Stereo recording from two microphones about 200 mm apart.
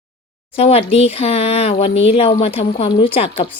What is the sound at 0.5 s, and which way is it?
Speech, 30° left (ahead or behind).